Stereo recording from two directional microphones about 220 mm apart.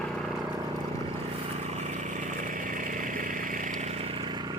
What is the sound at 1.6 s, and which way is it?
Vehicle, 30° right (ahead or behind).